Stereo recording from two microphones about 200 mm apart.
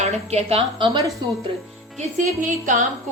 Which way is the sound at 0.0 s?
30° right (ahead or behind).